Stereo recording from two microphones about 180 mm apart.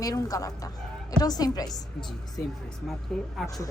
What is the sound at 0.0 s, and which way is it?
A woman's voice, 20° left (ahead or behind).